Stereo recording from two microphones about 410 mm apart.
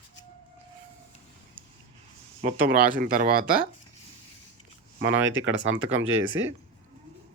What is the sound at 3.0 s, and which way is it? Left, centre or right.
Speech, right.